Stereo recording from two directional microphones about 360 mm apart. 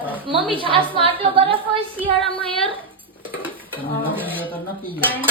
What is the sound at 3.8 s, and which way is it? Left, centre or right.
Dishes, centre.